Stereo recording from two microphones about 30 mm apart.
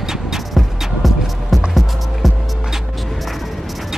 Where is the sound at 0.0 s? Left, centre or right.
Centre.